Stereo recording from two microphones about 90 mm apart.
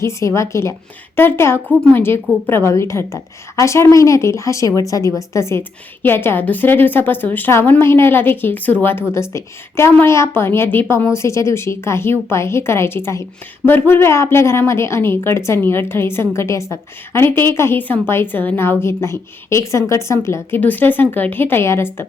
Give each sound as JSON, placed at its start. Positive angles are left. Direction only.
{"t": 0.0, "sound": "a woman's voice", "side_deg": 35}
{"t": 20.6, "sound": "a woman's voice", "side_deg": 20}